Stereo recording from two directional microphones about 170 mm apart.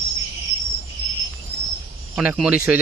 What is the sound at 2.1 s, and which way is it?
Speech, 10° right (ahead or behind).